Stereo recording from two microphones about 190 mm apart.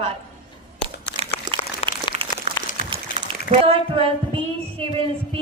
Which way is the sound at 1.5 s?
20° right (ahead or behind).